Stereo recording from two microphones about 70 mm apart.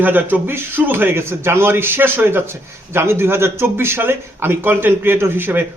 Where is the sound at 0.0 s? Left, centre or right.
Right.